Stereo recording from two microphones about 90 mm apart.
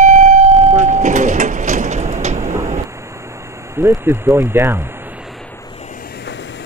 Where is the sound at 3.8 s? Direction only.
25° right (ahead or behind).